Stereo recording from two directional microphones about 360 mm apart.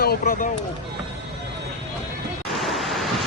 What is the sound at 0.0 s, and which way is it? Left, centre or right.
Speech, left.